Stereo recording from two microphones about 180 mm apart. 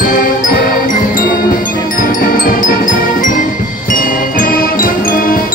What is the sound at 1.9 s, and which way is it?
Music, 50° left (ahead or behind).